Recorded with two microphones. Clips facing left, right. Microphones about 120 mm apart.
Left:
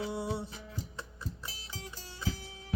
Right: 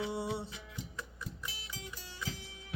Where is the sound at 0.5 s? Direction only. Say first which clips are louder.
Left 2 dB; 35° left (ahead or behind).